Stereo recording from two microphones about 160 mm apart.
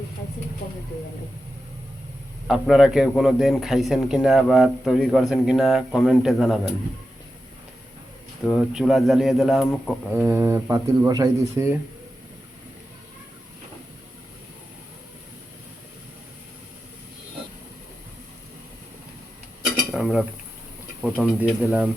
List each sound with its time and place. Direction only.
2.5 s a man's voice: centre (ahead or behind)
8.4 s a man's voice: centre (ahead or behind)
10.2 s speech: 15° right (ahead or behind)
19.9 s a sound: 5° right (ahead or behind)
21.0 s speech: 10° right (ahead or behind)